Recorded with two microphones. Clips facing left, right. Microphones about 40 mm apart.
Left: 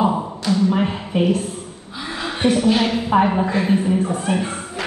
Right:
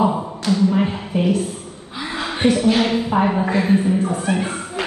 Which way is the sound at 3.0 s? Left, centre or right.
Left.